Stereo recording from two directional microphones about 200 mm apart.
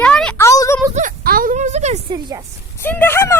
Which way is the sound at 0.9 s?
45° right (ahead or behind).